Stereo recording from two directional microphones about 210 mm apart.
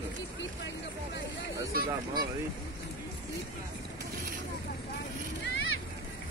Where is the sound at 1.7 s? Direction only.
45° right (ahead or behind).